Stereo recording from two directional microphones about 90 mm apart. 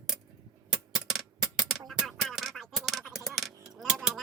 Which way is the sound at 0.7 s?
Centre (ahead or behind).